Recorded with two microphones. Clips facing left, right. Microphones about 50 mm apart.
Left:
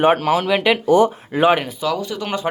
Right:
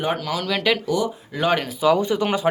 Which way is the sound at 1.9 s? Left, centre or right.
Right.